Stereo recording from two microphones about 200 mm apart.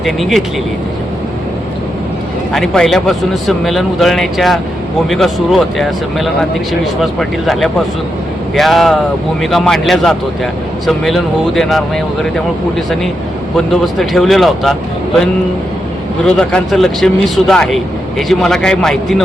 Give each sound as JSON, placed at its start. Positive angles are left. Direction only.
{"t": 0.0, "sound": "a man's voice", "side_deg": 0}
{"t": 2.5, "sound": "a man's voice", "side_deg": 0}
{"t": 16.2, "sound": "a man's voice", "side_deg": 5}